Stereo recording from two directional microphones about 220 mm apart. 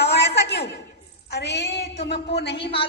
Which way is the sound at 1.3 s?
50° left (ahead or behind).